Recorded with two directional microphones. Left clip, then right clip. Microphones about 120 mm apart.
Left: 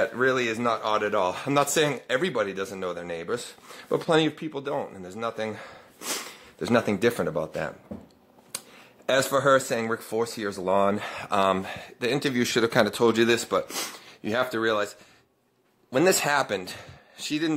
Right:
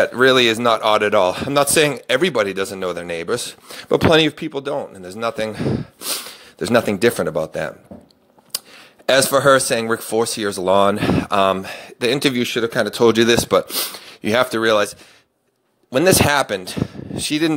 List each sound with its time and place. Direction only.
0.0 s speech: 45° right (ahead or behind)
1.3 s speech: 30° right (ahead or behind)
5.9 s a sound: 15° right (ahead or behind)
6.6 s speech: 35° right (ahead or behind)
12.4 s speech: 5° right (ahead or behind)
12.9 s speech: 35° right (ahead or behind)
15.9 s speech: 35° right (ahead or behind)